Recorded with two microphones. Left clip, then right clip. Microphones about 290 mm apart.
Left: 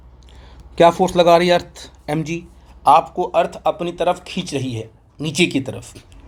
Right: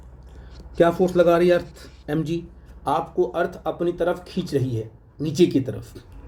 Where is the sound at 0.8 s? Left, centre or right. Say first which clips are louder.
Left 5 dB; centre.